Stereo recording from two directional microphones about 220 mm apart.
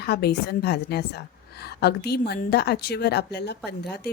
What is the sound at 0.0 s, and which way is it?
A woman's voice, 45° left (ahead or behind).